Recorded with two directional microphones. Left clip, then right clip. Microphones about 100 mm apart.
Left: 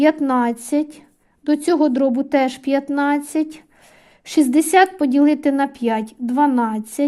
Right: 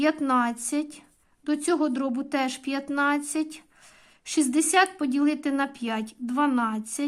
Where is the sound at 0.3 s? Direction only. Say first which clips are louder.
Left 5 dB; 40° left (ahead or behind).